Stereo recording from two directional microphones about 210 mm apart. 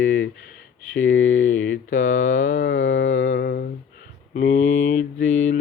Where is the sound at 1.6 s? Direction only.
40° left (ahead or behind).